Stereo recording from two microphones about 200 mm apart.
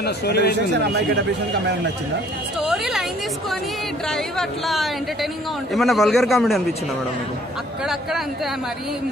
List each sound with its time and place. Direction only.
0.0 s speech: 55° left (ahead or behind)
2.6 s a man's voice: centre (ahead or behind)
4.1 s a man's voice: centre (ahead or behind)